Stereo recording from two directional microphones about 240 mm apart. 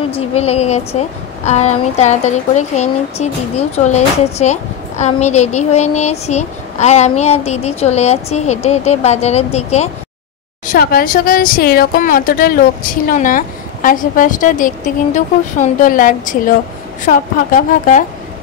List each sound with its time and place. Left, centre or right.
0.1 s a woman's voice: left
10.7 s a woman's voice: left